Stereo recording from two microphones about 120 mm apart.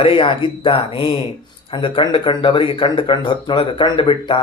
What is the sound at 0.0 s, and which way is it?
Speech, 45° left (ahead or behind).